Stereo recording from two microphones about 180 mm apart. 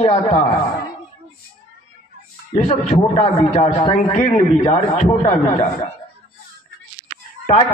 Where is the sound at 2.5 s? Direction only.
40° left (ahead or behind).